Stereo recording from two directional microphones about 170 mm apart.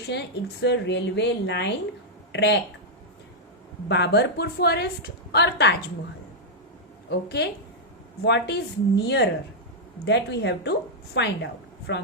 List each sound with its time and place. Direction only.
0.1 s a woman's voice: 90° left
3.8 s a woman's voice: 85° left
7.1 s a woman's voice: 85° left